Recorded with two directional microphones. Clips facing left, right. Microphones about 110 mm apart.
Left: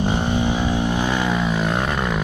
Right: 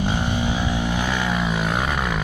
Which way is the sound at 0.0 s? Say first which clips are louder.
Left 3 dB; 20° left (ahead or behind).